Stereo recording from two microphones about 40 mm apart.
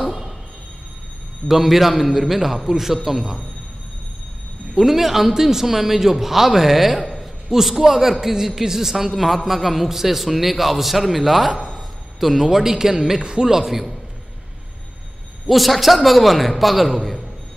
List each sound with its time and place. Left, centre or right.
0.0 s a sound: centre
1.5 s a man's voice: centre
4.7 s a man's voice: centre
15.4 s a man's voice: centre